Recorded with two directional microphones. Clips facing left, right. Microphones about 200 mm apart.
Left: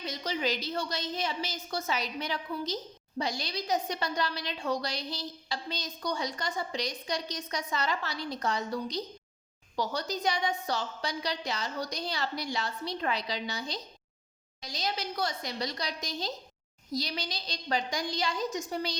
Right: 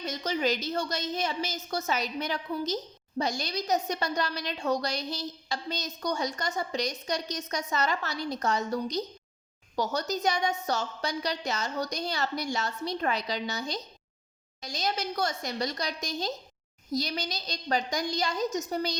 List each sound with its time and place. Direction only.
0.0 s a woman's voice: 45° right (ahead or behind)